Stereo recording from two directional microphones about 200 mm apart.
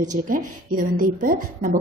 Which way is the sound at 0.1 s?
40° right (ahead or behind).